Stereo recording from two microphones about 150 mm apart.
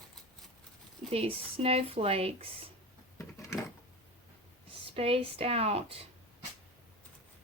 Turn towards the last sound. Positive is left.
turn(degrees=-40)  # may be behind; listen again after turning